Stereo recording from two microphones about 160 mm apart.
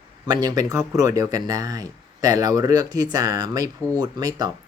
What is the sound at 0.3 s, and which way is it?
Speech, 25° right (ahead or behind).